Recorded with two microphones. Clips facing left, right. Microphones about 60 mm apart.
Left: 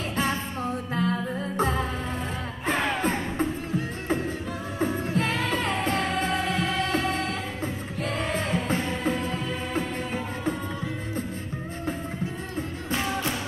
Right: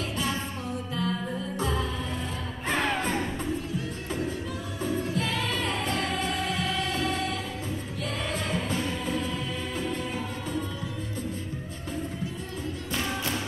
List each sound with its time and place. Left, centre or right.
1.0 s music: left
2.6 s music: centre
3.1 s music: left